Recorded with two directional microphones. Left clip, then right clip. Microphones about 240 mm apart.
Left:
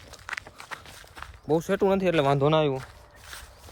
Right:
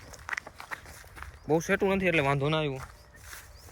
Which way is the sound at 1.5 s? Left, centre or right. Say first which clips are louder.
Left 3 dB; centre.